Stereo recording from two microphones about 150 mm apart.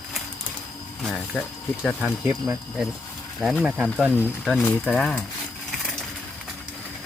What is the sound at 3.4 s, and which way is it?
Speech, centre (ahead or behind).